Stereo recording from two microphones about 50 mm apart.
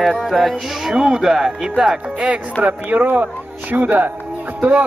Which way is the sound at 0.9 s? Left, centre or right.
Centre.